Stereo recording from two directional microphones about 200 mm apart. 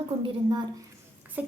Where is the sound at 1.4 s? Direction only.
10° right (ahead or behind).